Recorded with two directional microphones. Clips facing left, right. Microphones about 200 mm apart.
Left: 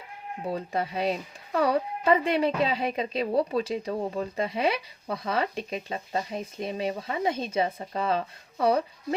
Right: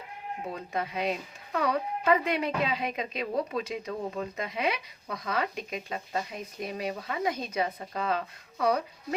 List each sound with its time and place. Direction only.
0.5 s a woman's voice: 30° left (ahead or behind)